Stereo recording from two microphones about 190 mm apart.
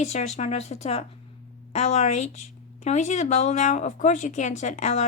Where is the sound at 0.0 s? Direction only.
35° left (ahead or behind).